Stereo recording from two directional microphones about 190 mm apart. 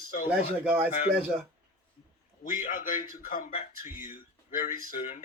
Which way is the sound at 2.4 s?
40° left (ahead or behind).